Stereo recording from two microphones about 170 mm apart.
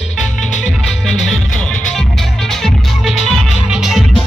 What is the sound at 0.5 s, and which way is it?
Music, centre (ahead or behind).